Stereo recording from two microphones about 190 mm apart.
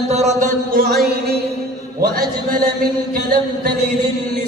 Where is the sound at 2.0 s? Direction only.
50° right (ahead or behind).